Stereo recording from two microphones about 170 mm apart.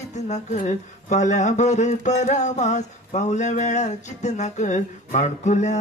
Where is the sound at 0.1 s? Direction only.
40° left (ahead or behind).